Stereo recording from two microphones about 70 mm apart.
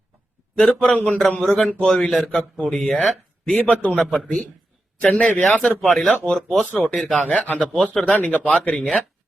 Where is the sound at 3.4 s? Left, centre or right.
Centre.